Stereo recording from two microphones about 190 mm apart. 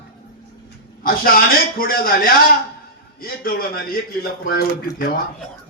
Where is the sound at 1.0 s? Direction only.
50° left (ahead or behind).